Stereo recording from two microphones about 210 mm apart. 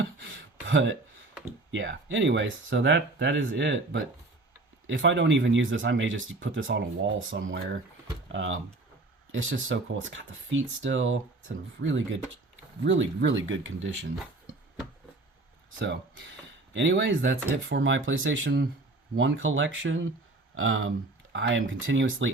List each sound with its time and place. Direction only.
0.0 s a sound: 65° right (ahead or behind)
1.7 s speech: 60° right (ahead or behind)
15.8 s speech: 60° right (ahead or behind)